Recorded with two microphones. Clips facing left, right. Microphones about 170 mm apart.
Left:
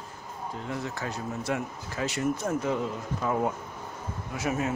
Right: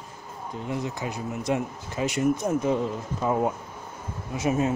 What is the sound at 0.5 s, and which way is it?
Speech, 15° right (ahead or behind).